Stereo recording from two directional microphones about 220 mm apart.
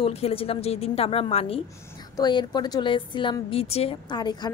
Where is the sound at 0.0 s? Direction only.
25° left (ahead or behind).